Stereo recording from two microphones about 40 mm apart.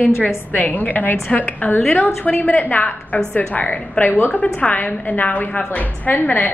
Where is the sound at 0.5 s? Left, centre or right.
Left.